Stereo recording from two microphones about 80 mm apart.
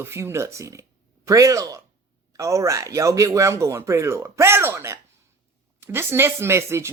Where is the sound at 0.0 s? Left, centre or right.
Right.